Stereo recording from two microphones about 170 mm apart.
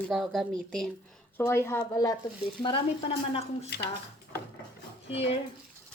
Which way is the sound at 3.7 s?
85° left.